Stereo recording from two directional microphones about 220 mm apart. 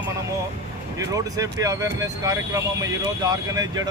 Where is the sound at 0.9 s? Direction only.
15° right (ahead or behind).